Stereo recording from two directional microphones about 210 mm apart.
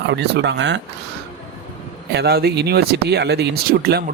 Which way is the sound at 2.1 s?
50° right (ahead or behind).